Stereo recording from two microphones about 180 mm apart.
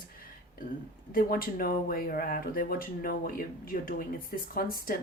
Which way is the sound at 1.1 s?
50° left (ahead or behind).